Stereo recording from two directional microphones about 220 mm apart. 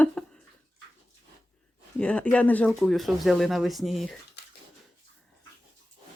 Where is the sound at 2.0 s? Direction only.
5° left (ahead or behind).